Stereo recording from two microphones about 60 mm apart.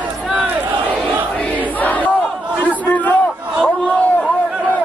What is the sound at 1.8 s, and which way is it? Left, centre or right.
Crowd, left.